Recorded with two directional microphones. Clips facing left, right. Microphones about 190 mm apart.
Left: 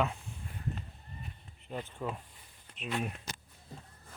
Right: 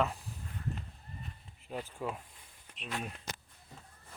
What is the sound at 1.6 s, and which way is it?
Speech, 5° right (ahead or behind).